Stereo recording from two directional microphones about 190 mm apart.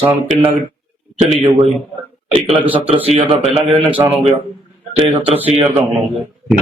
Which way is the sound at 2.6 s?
25° right (ahead or behind).